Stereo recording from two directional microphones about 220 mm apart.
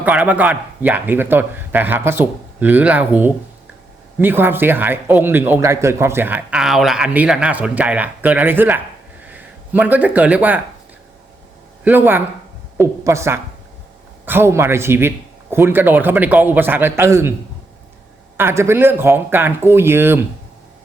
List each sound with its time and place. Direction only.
0.0 s speech: 5° right (ahead or behind)
11.9 s speech: 10° right (ahead or behind)
18.3 s speech: 10° right (ahead or behind)